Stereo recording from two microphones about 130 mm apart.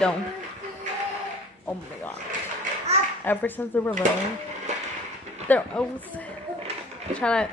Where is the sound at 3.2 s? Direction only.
15° left (ahead or behind).